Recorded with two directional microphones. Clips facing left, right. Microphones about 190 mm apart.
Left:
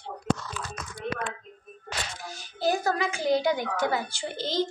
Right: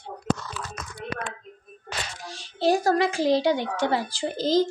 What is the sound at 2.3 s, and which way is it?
A child's voice, 30° right (ahead or behind).